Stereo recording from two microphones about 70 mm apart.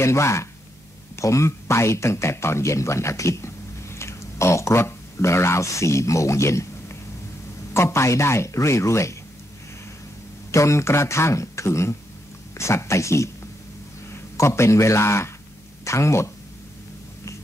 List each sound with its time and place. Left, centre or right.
0.0 s speech: left
10.5 s speech: left
14.3 s speech: left